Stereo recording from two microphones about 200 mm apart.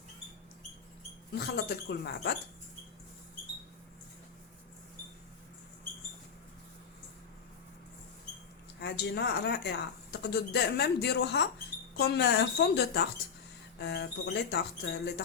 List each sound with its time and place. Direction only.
1.4 s speech: 55° left (ahead or behind)
8.8 s speech: 55° left (ahead or behind)